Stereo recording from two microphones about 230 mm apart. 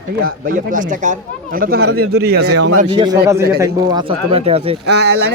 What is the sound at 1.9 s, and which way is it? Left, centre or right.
Speech, right.